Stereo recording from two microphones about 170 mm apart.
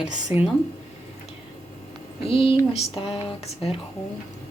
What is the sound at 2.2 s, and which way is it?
Speech, 35° left (ahead or behind).